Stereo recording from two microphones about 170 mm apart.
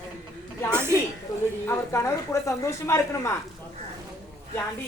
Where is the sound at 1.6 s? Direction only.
15° left (ahead or behind).